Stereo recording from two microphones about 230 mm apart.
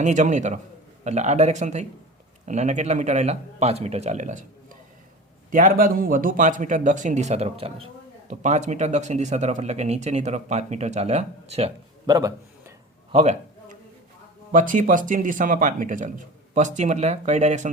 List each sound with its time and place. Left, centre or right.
0.0 s speech: right; by 13.1 s centre
13.1 s a sound: right
14.5 s speech: right